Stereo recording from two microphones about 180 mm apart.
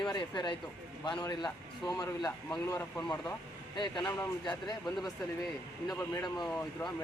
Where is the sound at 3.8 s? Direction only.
25° left (ahead or behind).